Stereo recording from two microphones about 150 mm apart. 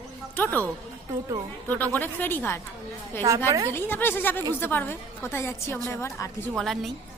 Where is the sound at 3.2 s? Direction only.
25° right (ahead or behind).